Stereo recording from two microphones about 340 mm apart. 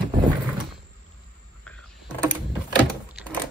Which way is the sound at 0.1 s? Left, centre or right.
Centre.